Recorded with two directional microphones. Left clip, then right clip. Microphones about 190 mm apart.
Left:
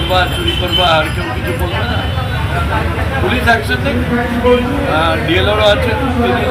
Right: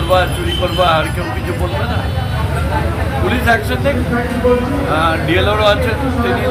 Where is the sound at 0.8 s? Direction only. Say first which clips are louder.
Left 1 dB; 5° right (ahead or behind).